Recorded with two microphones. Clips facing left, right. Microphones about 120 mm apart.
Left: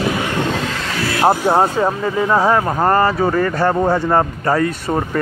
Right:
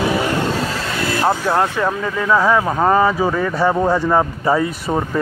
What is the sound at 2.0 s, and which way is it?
Speech, 10° left (ahead or behind).